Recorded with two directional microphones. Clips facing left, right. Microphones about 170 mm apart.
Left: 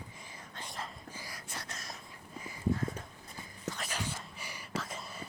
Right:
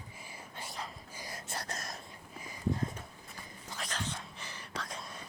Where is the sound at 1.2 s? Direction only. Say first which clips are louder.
Right 4 dB; 20° right (ahead or behind).